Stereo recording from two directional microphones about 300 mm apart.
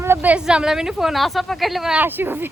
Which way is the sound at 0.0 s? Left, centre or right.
Centre.